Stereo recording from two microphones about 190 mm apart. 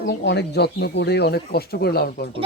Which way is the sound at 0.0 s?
65° left (ahead or behind).